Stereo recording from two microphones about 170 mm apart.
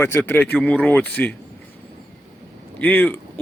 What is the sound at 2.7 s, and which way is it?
Speech, 10° left (ahead or behind).